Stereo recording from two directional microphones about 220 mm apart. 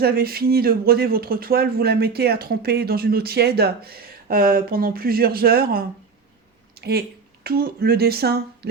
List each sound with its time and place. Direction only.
0.0 s speech: 45° right (ahead or behind)
6.7 s a sound: 45° right (ahead or behind)
7.4 s speech: 45° right (ahead or behind)